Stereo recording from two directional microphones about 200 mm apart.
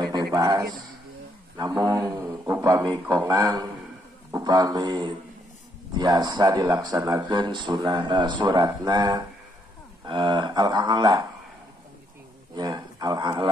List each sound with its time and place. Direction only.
0.0 s a sound: 20° right (ahead or behind)
1.6 s a man's voice: 20° right (ahead or behind)
12.5 s speech: 20° right (ahead or behind)